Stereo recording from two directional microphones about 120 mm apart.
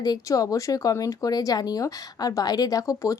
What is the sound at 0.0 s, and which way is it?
A woman's voice, 30° left (ahead or behind).